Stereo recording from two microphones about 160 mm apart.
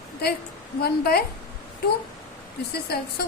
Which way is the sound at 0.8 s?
75° left (ahead or behind).